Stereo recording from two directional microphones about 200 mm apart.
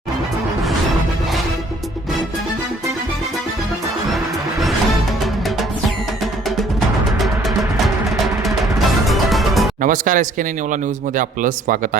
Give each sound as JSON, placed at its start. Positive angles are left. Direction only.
{"t": 8.1, "sound": "music", "side_deg": 0}
{"t": 9.8, "sound": "speech", "side_deg": -40}